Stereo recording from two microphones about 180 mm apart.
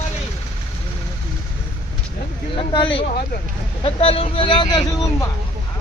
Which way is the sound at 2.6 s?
25° left (ahead or behind).